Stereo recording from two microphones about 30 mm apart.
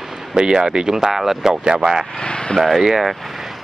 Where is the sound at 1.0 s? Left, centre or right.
Centre.